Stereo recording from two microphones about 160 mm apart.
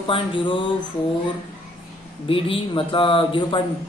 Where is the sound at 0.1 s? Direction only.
30° left (ahead or behind).